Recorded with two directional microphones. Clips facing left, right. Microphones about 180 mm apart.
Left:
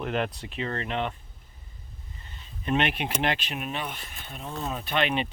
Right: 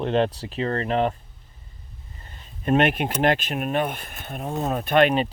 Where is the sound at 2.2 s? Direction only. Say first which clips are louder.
Right 7 dB; 45° right (ahead or behind).